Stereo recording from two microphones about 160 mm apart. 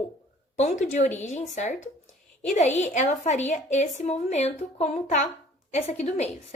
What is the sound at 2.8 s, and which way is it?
Speech, 45° left (ahead or behind).